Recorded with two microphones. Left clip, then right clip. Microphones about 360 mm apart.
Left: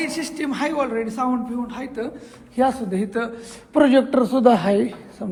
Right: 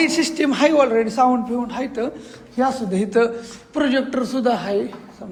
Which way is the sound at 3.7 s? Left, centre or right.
Centre.